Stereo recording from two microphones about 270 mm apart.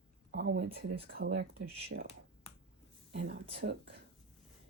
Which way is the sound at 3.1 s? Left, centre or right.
Right.